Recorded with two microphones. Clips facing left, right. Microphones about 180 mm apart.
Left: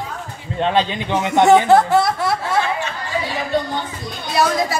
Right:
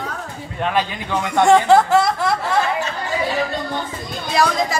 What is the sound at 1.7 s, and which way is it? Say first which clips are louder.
Speech: even; centre (ahead or behind).